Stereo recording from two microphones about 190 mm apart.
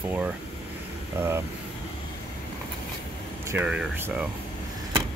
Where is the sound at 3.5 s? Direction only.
5° right (ahead or behind).